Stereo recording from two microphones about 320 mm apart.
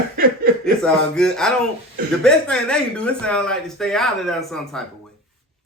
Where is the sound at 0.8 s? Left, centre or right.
Centre.